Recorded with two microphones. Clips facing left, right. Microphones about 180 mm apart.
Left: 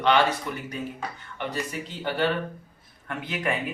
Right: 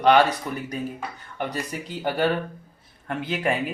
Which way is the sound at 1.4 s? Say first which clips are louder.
Right 2 dB; 40° right (ahead or behind).